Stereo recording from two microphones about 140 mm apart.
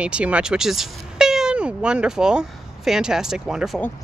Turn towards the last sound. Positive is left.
turn(degrees=0)  # may be behind; listen again after turning